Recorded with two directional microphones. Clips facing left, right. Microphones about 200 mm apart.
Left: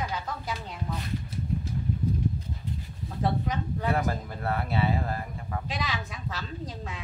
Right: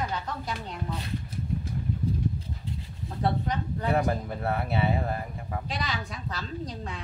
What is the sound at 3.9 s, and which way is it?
Speech, 25° right (ahead or behind).